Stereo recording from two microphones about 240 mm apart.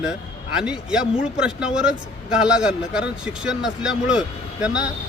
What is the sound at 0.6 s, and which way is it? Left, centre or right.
Speech, centre.